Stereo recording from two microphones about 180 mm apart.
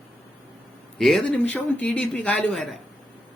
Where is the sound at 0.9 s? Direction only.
Centre (ahead or behind).